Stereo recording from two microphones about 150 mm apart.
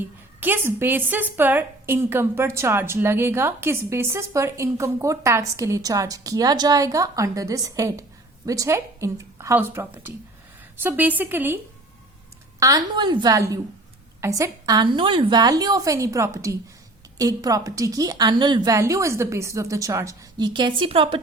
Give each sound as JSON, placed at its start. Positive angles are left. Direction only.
{"t": 0.0, "sound": "a woman's voice", "side_deg": -15}